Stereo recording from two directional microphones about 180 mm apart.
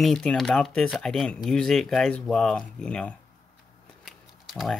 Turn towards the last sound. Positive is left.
turn(degrees=0)  # may be behind; listen again after turning